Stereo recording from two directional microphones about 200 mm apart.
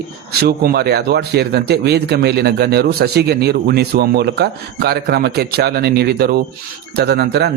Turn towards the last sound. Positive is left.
turn(degrees=-55)  # may be behind; listen again after turning